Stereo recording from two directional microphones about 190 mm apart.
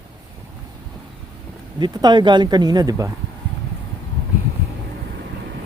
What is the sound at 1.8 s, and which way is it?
Speech, 20° right (ahead or behind).